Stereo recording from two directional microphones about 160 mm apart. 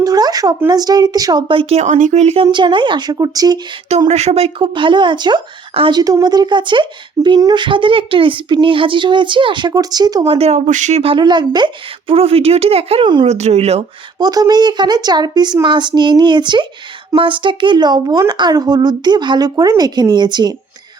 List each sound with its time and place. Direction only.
0.0 s speech: 25° right (ahead or behind)
1.8 s speech: 50° right (ahead or behind); by 3.6 s 25° right (ahead or behind)
4.1 s speech: 40° right (ahead or behind); by 10.2 s 25° right (ahead or behind)
10.2 s speech: 40° right (ahead or behind)
13.2 s speech: 45° right (ahead or behind)
14.2 s speech: 25° right (ahead or behind)